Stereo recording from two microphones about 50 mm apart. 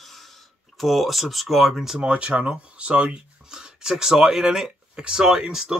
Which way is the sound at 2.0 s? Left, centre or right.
Centre.